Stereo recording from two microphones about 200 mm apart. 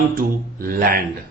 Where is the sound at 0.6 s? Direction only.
45° right (ahead or behind).